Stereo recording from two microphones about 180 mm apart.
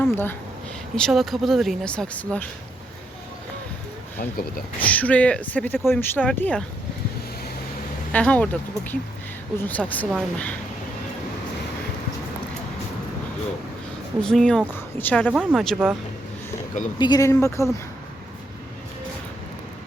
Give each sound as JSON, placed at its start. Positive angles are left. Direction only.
{"t": 0.0, "sound": "speech", "side_deg": 10}
{"t": 4.2, "sound": "speech", "side_deg": 55}
{"t": 4.8, "sound": "speech", "side_deg": 10}
{"t": 8.1, "sound": "speech", "side_deg": 5}
{"t": 14.2, "sound": "speech", "side_deg": 5}
{"t": 15.3, "sound": "speech", "side_deg": 0}
{"t": 17.0, "sound": "speech", "side_deg": 20}